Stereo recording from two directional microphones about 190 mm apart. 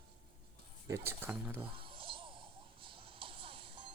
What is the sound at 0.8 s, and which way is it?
Speech, 15° right (ahead or behind).